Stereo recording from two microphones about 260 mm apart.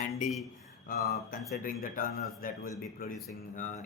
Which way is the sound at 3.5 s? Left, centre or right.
Left.